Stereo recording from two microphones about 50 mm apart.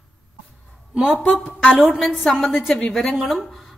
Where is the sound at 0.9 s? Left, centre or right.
Centre.